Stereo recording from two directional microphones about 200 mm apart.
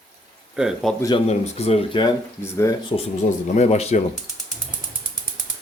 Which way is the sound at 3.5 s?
30° left (ahead or behind).